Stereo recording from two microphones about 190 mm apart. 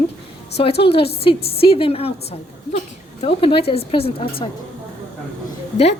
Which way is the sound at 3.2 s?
30° left (ahead or behind).